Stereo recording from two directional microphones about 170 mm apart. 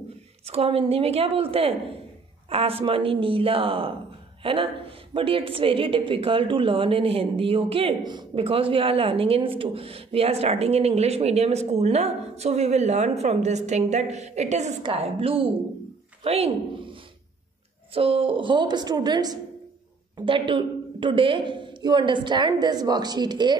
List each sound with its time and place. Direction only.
0.5 s a woman's voice: 35° right (ahead or behind)